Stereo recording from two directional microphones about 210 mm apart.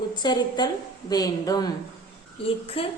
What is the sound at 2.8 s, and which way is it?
Speech, 25° left (ahead or behind).